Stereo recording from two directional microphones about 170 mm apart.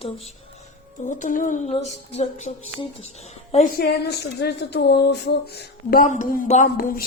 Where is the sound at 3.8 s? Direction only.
70° left (ahead or behind).